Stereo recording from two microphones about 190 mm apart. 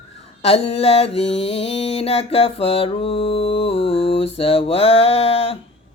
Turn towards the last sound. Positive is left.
turn(degrees=30)  # may be behind; listen again after turning